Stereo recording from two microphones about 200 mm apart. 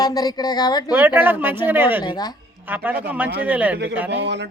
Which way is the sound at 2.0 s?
20° left (ahead or behind).